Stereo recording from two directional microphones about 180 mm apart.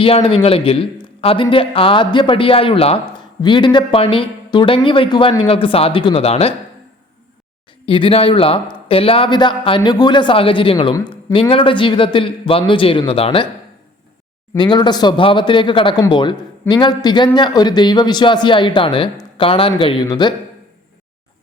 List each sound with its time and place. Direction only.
0.0 s a man's voice: 30° left (ahead or behind)
7.9 s speech: 30° left (ahead or behind)
14.5 s speech: 25° left (ahead or behind)